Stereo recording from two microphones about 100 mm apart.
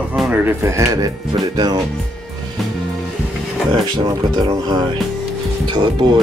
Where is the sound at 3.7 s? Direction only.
50° right (ahead or behind).